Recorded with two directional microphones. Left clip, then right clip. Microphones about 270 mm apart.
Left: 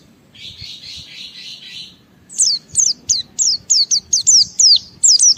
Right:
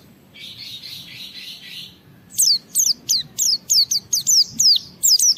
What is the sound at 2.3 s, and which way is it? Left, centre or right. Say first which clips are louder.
Bird: left 1 dB; centre.